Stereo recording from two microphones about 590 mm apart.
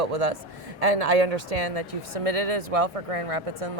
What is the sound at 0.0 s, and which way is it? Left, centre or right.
A man's voice, right.